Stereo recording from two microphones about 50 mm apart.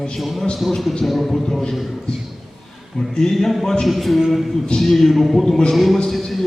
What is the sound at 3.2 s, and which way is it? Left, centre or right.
A man's voice, centre.